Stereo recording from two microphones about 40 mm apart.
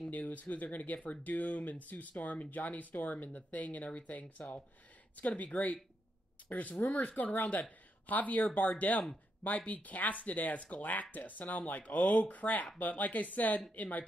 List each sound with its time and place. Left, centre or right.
0.1 s speech: left
0.9 s speech: left
1.2 s speech: left